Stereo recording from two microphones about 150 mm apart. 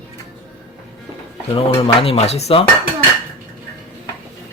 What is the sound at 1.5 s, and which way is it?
A man's voice, 40° left (ahead or behind).